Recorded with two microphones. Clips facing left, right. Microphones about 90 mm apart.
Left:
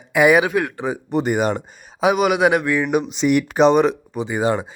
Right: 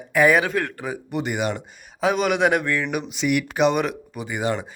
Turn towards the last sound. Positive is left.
turn(degrees=30)  # may be behind; listen again after turning